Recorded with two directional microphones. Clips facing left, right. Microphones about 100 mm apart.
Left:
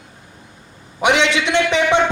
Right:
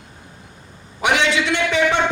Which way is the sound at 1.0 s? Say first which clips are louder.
Left 2 dB; 20° left (ahead or behind).